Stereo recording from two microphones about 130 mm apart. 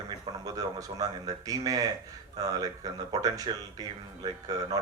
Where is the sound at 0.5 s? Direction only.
30° right (ahead or behind).